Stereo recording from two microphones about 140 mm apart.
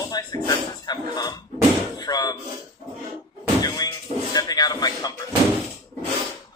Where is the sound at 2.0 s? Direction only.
30° left (ahead or behind).